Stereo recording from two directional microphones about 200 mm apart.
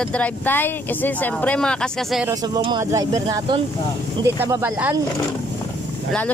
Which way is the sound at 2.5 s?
20° right (ahead or behind).